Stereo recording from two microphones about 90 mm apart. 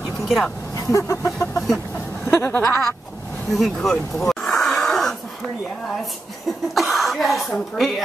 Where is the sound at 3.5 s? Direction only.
Centre (ahead or behind).